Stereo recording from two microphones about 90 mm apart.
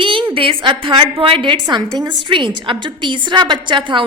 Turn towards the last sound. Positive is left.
turn(degrees=-65)  # may be behind; listen again after turning